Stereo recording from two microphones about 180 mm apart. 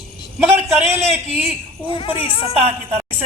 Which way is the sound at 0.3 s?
15° right (ahead or behind).